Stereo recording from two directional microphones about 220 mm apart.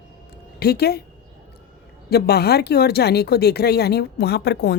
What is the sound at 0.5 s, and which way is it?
Speech, 45° left (ahead or behind).